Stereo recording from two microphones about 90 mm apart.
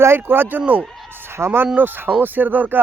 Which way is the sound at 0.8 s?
5° left (ahead or behind).